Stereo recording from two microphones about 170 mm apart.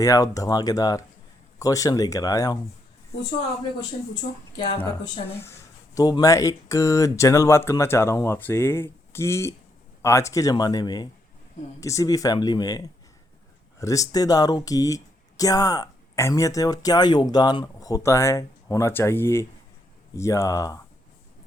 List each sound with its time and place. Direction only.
0.0 s speech: 20° left (ahead or behind)
4.1 s speech: 30° left (ahead or behind)
5.4 s speech: 15° left (ahead or behind)